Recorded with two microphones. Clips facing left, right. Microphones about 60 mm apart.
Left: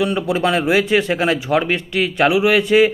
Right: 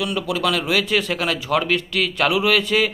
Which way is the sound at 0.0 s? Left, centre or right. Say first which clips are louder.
Left 4 dB; left.